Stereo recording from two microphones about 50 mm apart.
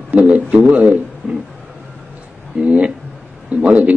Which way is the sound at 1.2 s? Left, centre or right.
Centre.